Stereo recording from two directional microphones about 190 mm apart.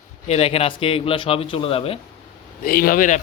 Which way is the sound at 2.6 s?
50° left (ahead or behind).